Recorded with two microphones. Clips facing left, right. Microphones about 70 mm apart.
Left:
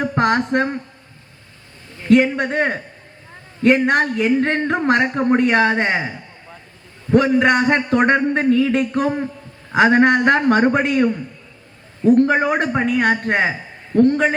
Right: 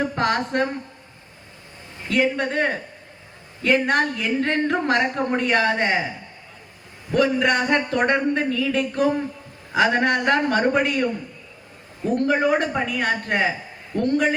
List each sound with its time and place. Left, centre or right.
0.0 s a sound: left
2.0 s a man's voice: left
3.8 s a man's voice: left
7.1 s a man's voice: left